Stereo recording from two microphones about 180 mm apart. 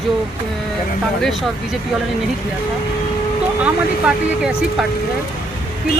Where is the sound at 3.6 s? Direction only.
5° right (ahead or behind).